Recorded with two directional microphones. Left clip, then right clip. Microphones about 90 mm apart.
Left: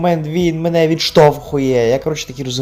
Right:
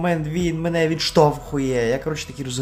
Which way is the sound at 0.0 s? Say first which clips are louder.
Left 7 dB; 30° left (ahead or behind).